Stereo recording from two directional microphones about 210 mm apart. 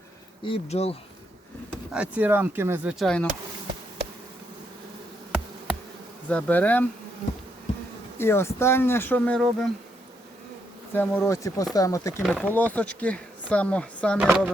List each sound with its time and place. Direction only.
0.4 s speech: 30° left (ahead or behind)
1.7 s speech: 5° right (ahead or behind)
6.2 s speech: 5° left (ahead or behind)
8.2 s speech: 10° left (ahead or behind)
10.9 s speech: 10° left (ahead or behind)
14.2 s speech: 5° right (ahead or behind)